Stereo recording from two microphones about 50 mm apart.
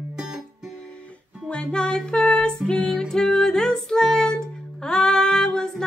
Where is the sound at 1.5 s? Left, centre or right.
Centre.